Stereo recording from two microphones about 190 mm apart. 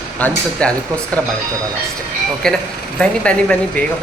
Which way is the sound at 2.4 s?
Centre (ahead or behind).